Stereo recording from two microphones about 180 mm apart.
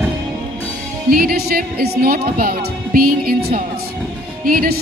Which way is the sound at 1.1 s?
55° right (ahead or behind).